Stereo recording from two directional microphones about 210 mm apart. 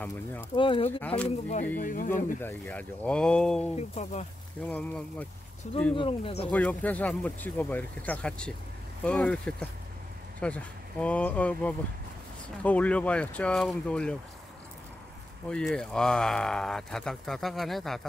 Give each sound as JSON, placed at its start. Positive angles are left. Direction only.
{"t": 0.0, "sound": "speech", "side_deg": 10}
{"t": 0.6, "sound": "speech", "side_deg": 25}
{"t": 1.0, "sound": "speech", "side_deg": 5}
{"t": 1.8, "sound": "speech", "side_deg": 40}
{"t": 2.4, "sound": "speech", "side_deg": 5}
{"t": 3.7, "sound": "speech", "side_deg": 30}
{"t": 4.6, "sound": "speech", "side_deg": 5}
{"t": 5.9, "sound": "speech", "side_deg": 25}
{"t": 6.5, "sound": "speech", "side_deg": 5}
{"t": 15.5, "sound": "speech", "side_deg": 5}